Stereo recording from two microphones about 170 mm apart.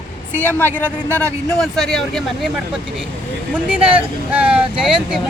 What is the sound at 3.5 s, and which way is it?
Speech, 5° right (ahead or behind).